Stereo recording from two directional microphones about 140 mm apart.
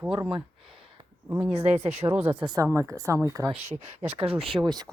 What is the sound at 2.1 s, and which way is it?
Speech, 15° right (ahead or behind).